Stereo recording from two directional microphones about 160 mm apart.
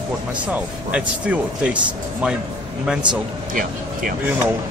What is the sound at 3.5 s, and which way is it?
Speech, 60° right (ahead or behind).